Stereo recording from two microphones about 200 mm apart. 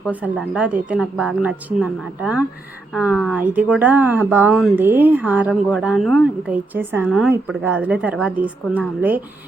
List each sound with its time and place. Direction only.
0.1 s speech: 5° right (ahead or behind)
3.1 s speech: 10° left (ahead or behind)
3.3 s speech: 10° right (ahead or behind)